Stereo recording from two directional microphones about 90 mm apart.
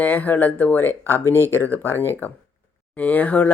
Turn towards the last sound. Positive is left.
turn(degrees=15)  # may be behind; listen again after turning